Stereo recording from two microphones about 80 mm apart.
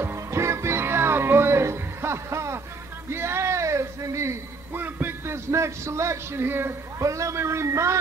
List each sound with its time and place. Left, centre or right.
0.0 s music: right
3.1 s speech: right
4.7 s speech: right
7.0 s speech: right